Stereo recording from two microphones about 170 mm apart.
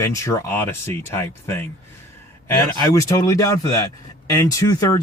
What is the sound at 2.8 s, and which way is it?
Speech, 20° left (ahead or behind).